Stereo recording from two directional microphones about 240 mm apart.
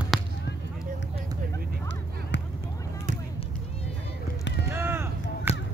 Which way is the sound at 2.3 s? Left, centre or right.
Left.